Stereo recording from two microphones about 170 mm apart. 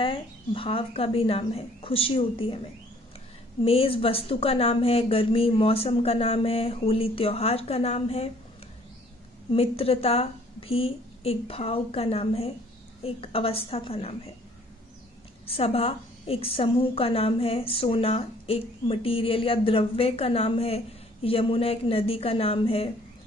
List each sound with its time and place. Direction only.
0.0 s a woman's voice: 30° left (ahead or behind)
3.6 s a woman's voice: 35° left (ahead or behind)
9.5 s a woman's voice: 35° left (ahead or behind)
15.4 s a woman's voice: 35° left (ahead or behind)